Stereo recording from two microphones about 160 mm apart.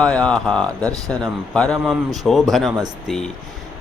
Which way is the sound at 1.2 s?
5° left (ahead or behind).